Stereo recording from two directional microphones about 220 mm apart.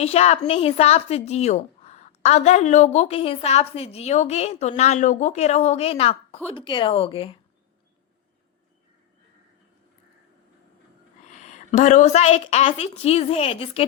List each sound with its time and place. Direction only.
0.0 s a woman's voice: 30° left (ahead or behind)
11.2 s a woman's voice: 35° left (ahead or behind)